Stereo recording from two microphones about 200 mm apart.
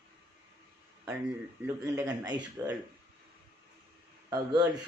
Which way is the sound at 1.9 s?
20° right (ahead or behind).